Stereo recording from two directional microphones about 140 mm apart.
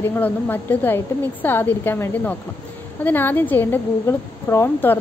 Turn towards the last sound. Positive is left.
turn(degrees=15)  # may be behind; listen again after turning